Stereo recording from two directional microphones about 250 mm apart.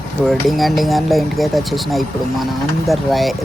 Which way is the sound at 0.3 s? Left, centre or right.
Centre.